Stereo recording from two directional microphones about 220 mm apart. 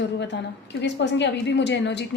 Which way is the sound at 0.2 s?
50° left (ahead or behind).